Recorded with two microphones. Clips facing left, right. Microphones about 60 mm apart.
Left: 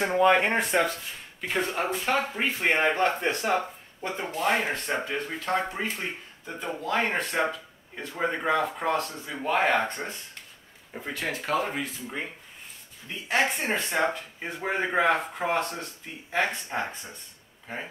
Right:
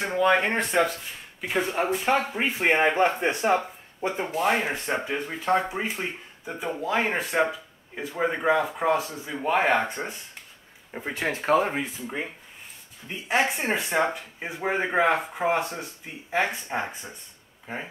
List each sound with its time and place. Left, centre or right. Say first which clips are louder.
0.3 s speech: even; centre
2.0 s speech: right 2 dB; centre
4.3 s speech: even; centre